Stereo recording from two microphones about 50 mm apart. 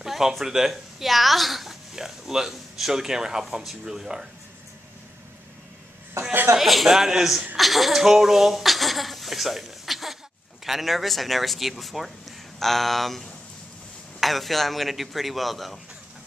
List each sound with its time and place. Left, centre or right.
0.0 s speech: centre
6.2 s chuckle: right
6.5 s speech: centre